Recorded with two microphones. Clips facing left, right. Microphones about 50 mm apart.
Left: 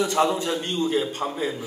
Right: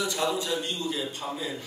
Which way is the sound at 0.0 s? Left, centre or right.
Left.